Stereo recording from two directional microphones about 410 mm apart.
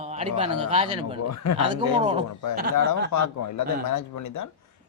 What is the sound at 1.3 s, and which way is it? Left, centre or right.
Speech, left.